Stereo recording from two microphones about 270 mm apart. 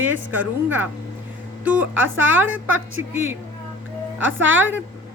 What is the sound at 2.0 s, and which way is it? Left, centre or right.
A woman's voice, right.